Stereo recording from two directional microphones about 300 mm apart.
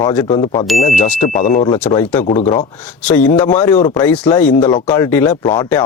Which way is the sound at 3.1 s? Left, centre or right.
Centre.